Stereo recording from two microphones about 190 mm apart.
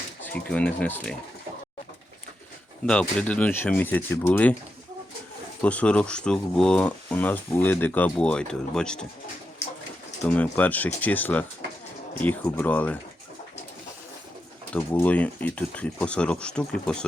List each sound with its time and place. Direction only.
0.2 s speech: 5° left (ahead or behind)
2.8 s speech: 5° left (ahead or behind)
5.6 s speech: 5° left (ahead or behind)
10.2 s speech: 5° left (ahead or behind)
14.7 s speech: 5° left (ahead or behind)